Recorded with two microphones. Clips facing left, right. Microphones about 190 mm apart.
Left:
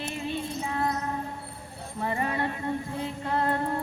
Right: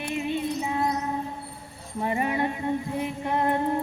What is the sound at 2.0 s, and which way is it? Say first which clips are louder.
Music: right 3 dB; 15° right (ahead or behind).